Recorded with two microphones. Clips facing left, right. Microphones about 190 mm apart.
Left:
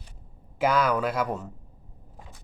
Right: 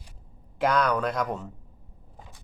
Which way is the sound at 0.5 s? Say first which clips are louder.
Left 1 dB; 5° left (ahead or behind).